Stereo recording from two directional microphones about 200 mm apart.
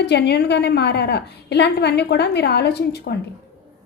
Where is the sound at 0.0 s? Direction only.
55° left (ahead or behind).